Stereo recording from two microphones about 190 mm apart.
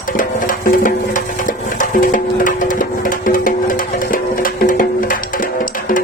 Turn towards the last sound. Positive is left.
turn(degrees=45)  # may be behind; listen again after turning